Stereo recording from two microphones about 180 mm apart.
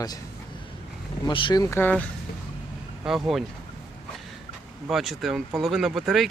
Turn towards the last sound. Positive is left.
turn(degrees=0)  # may be behind; listen again after turning